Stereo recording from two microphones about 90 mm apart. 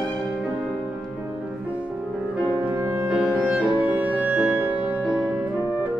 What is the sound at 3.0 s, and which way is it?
Music, 15° right (ahead or behind).